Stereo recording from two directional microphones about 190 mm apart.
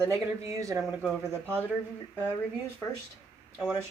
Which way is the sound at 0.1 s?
15° right (ahead or behind).